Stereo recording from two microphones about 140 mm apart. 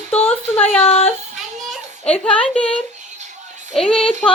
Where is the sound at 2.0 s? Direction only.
10° left (ahead or behind).